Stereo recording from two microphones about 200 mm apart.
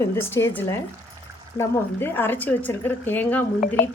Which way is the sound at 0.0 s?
10° left (ahead or behind).